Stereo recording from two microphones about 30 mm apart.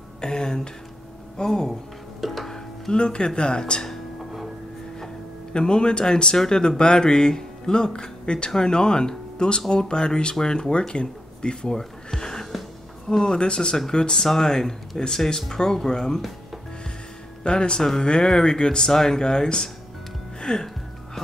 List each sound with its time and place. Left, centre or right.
0.2 s a sound: left
1.4 s speech: centre
2.2 s music: centre
2.9 s speech: left
5.5 s speech: left
12.1 s music: centre
13.1 s speech: left
14.1 s speech: centre
17.4 s speech: left
20.3 s music: left